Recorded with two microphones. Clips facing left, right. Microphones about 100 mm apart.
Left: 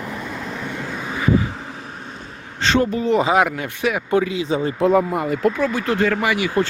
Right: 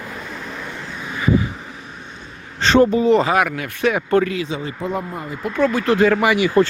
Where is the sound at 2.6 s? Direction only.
35° right (ahead or behind).